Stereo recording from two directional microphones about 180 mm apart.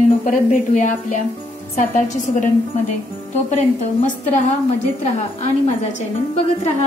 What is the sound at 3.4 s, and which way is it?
Speech, 40° left (ahead or behind).